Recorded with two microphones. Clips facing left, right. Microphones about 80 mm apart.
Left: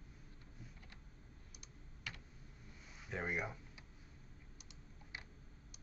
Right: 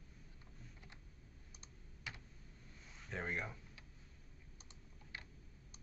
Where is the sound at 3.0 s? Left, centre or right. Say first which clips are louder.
Left 2 dB; centre.